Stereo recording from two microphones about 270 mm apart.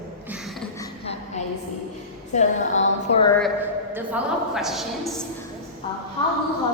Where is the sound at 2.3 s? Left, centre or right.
Left.